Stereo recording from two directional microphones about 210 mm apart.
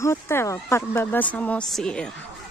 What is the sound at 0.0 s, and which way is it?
A woman's voice, 10° left (ahead or behind).